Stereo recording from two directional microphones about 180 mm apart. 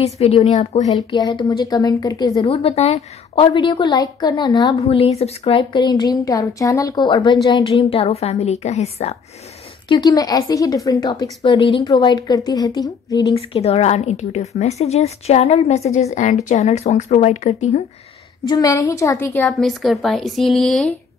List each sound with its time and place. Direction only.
0.0 s a woman's voice: 35° left (ahead or behind)
0.9 s a woman's voice: 25° left (ahead or behind)
2.4 s a woman's voice: 35° left (ahead or behind)
4.7 s a woman's voice: 35° left (ahead or behind)
9.8 s a woman's voice: 25° left (ahead or behind)
13.4 s a woman's voice: 35° left (ahead or behind)
18.4 s a woman's voice: 20° left (ahead or behind)
19.5 s speech: centre (ahead or behind)